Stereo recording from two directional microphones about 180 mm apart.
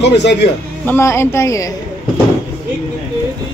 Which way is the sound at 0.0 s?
70° left (ahead or behind).